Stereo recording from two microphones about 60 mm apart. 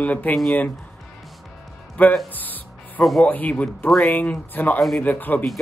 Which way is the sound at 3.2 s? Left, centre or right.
Left.